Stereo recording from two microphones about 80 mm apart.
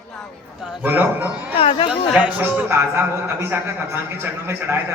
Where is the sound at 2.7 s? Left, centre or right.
Right.